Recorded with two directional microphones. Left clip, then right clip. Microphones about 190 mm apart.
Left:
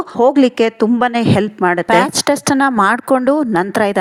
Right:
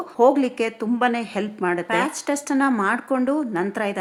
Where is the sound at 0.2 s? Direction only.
35° left (ahead or behind).